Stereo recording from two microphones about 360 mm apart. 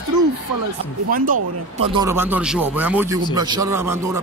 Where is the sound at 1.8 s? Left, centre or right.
Centre.